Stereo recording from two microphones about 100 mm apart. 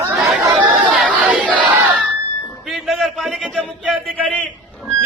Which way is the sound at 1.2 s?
10° right (ahead or behind).